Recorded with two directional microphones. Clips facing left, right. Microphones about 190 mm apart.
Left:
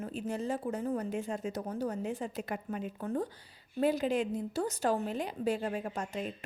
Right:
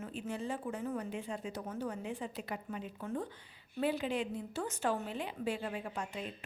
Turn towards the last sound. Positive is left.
turn(degrees=45)  # may be behind; listen again after turning